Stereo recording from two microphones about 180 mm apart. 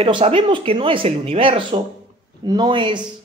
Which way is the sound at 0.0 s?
30° right (ahead or behind).